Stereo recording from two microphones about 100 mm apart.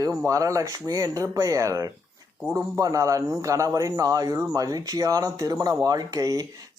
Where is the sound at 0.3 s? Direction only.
35° right (ahead or behind).